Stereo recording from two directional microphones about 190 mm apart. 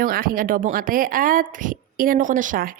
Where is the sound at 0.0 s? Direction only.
50° right (ahead or behind).